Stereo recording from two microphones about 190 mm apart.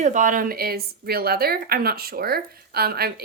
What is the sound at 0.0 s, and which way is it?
A woman's voice, 40° right (ahead or behind).